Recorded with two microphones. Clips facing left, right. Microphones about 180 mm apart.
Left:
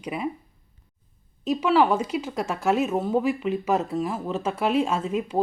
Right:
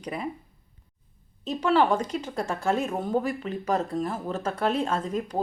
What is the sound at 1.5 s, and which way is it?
Speech, 5° left (ahead or behind).